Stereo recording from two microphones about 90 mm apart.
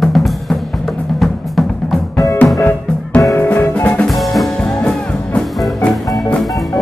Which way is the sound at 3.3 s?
25° left (ahead or behind).